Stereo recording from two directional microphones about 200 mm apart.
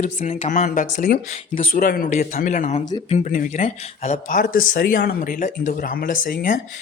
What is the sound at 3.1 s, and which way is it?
Speech, 40° left (ahead or behind).